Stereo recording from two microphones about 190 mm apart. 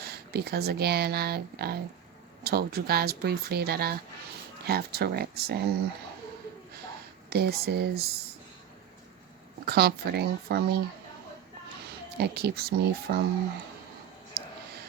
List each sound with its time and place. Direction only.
0.0 s speech: 55° right (ahead or behind)
7.3 s speech: 55° right (ahead or behind)
9.6 s speech: 55° right (ahead or behind)
12.1 s speech: 55° right (ahead or behind)
14.4 s a sound: 55° right (ahead or behind)